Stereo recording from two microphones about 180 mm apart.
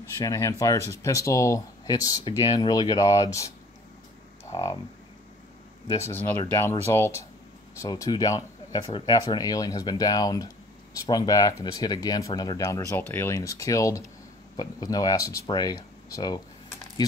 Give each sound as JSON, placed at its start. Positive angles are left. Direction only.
{"t": 0.2, "sound": "speech", "side_deg": 20}
{"t": 4.5, "sound": "a sound", "side_deg": 20}
{"t": 5.9, "sound": "speech", "side_deg": 15}